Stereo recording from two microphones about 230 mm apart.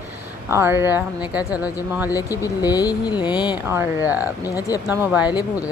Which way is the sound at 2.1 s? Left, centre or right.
Centre.